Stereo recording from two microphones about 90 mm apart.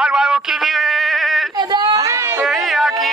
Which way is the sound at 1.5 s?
55° right (ahead or behind).